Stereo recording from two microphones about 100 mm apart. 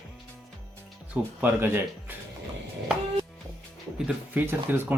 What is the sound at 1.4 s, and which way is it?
Speech, 20° right (ahead or behind).